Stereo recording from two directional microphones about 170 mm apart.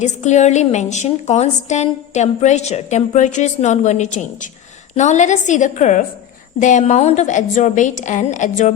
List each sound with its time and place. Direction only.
0.0 s a woman's voice: 45° left (ahead or behind)